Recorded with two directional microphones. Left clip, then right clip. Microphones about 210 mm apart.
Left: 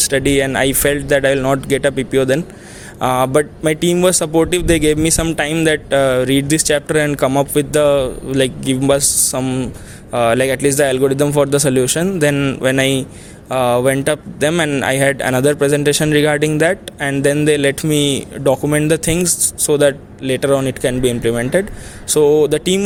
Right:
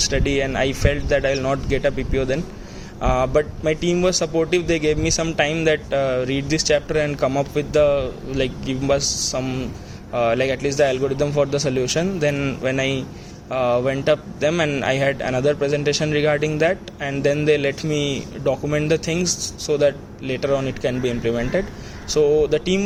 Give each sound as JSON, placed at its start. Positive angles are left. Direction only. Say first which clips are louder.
{"t": 0.0, "sound": "speech", "louder": "left 6 dB", "side_deg": 50}